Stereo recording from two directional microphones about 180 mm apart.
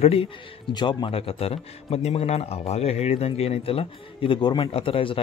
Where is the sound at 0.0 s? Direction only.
35° left (ahead or behind).